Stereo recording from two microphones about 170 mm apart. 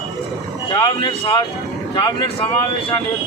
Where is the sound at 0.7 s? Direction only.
25° left (ahead or behind).